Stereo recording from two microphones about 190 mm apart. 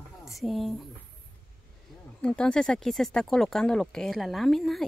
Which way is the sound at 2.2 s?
5° left (ahead or behind).